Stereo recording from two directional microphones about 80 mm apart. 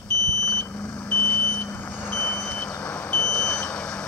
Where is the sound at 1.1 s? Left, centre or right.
Centre.